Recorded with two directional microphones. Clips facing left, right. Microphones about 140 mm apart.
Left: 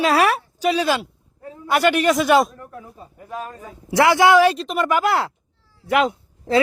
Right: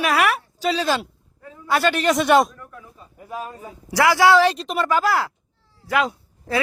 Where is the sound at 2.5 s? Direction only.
35° left (ahead or behind).